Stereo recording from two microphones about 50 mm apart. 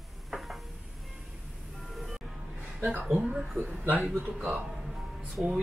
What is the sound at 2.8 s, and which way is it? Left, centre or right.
A man's voice, right.